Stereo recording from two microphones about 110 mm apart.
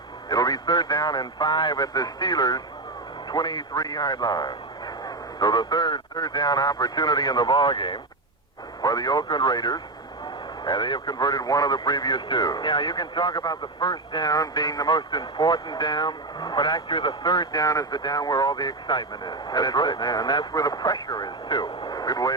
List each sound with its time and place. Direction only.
0.3 s speech: 35° left (ahead or behind)